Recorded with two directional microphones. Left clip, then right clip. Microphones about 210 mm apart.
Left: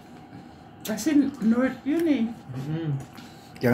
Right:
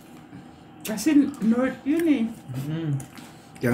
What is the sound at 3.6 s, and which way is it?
Speech, 20° left (ahead or behind).